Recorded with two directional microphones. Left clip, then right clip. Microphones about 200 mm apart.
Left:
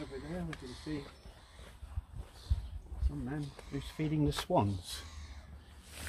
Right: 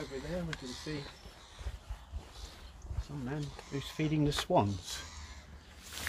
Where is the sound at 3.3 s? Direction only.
5° left (ahead or behind).